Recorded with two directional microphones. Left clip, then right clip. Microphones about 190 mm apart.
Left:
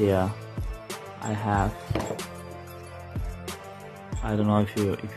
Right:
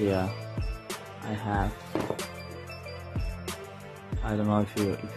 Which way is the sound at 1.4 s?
15° left (ahead or behind).